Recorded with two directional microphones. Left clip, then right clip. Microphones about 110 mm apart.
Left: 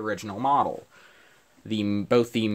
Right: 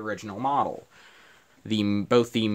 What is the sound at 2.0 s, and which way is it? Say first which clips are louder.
Speech: even; 15° right (ahead or behind).